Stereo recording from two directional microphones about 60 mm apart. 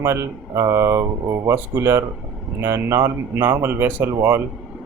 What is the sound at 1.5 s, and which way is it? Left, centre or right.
Speech, right.